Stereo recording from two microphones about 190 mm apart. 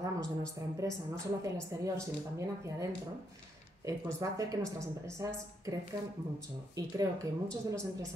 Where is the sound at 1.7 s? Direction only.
15° right (ahead or behind).